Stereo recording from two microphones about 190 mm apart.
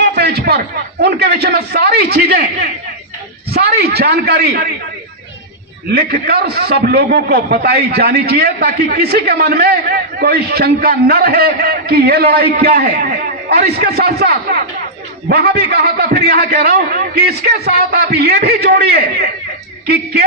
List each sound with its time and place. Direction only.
0.0 s a sound: 60° right (ahead or behind)
1.0 s a man's voice: 60° right (ahead or behind)
3.5 s a man's voice: 55° right (ahead or behind)
5.9 s a man's voice: 55° right (ahead or behind)